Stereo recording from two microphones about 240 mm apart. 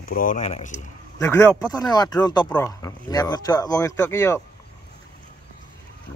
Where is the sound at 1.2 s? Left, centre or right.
Centre.